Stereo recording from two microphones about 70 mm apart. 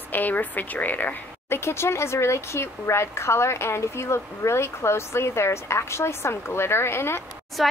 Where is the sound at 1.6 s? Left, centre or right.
Left.